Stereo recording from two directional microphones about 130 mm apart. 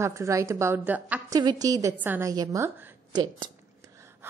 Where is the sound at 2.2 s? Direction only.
30° right (ahead or behind).